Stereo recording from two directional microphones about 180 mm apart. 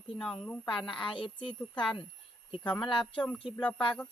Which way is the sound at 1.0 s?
25° left (ahead or behind).